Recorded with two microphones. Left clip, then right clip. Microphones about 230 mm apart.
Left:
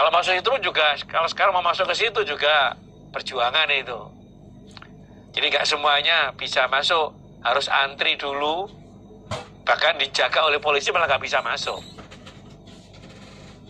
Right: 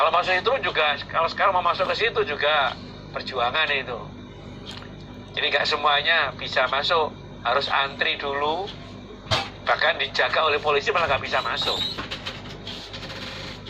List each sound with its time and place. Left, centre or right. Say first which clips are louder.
0.0 s speech: left 1 dB; left
5.4 s speech: left 1 dB; left
9.6 s speech: left 3 dB; left